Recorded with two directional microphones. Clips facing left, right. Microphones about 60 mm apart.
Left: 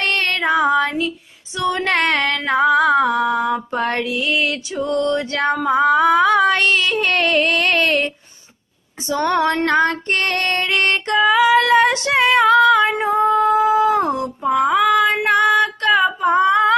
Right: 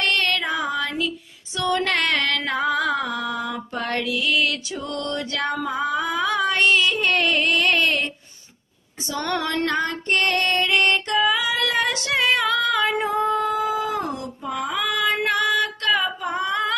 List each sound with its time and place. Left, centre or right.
0.0 s female singing: left
1.9 s music: left
9.2 s music: left
9.7 s female singing: left
13.3 s singing: left
13.9 s a sound: left
15.2 s female singing: left